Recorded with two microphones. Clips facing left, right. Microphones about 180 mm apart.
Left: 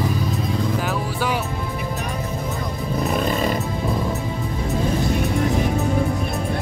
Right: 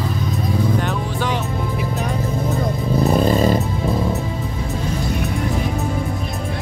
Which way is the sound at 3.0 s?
35° right (ahead or behind).